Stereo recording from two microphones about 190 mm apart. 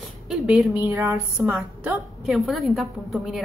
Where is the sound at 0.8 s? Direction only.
15° right (ahead or behind).